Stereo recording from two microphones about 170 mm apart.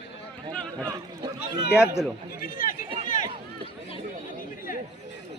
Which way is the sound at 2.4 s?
55° left (ahead or behind).